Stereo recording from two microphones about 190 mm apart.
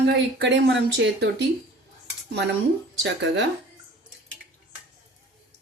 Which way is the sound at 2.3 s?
65° right (ahead or behind).